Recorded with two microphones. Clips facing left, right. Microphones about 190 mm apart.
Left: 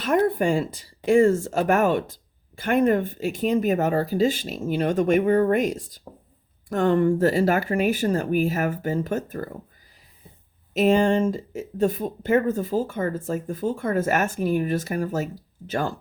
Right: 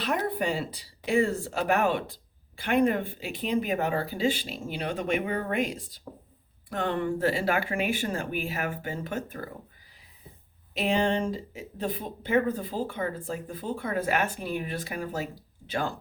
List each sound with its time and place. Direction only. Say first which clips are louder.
0.0 s speech: left 8 dB; 45° left (ahead or behind)
10.8 s speech: left 7 dB; 45° left (ahead or behind)